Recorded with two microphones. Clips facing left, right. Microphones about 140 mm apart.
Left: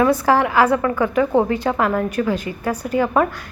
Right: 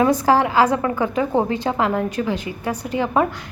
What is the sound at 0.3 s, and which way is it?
Speech, 35° right (ahead or behind).